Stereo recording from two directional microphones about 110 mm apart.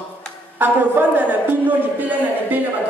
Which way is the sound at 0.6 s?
15° right (ahead or behind).